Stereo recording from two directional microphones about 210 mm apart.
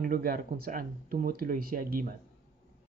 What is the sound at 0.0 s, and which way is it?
Speech, 45° right (ahead or behind).